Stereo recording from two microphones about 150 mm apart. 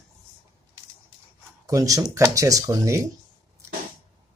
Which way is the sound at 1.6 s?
20° right (ahead or behind).